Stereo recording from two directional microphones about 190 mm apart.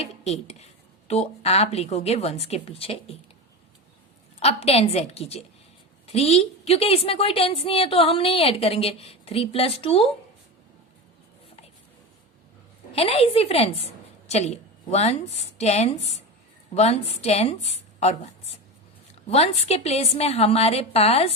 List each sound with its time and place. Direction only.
0.0 s a woman's voice: 35° left (ahead or behind)
4.4 s a woman's voice: 30° left (ahead or behind)
13.0 s a woman's voice: 30° left (ahead or behind)
19.3 s a woman's voice: 35° left (ahead or behind)